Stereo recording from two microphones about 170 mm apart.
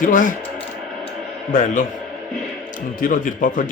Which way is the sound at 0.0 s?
50° left (ahead or behind).